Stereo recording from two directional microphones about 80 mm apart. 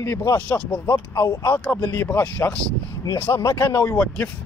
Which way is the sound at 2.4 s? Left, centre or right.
Left.